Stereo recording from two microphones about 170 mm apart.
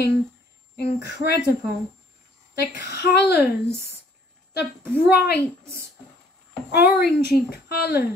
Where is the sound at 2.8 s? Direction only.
75° left (ahead or behind).